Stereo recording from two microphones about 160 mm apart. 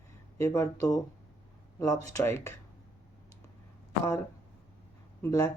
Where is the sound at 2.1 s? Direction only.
15° left (ahead or behind).